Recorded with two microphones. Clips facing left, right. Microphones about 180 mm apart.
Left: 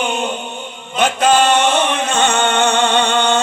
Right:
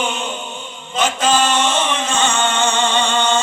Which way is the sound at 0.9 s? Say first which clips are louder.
Left 3 dB; 60° left (ahead or behind).